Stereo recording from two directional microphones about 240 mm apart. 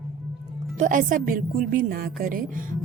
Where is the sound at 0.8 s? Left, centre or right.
Right.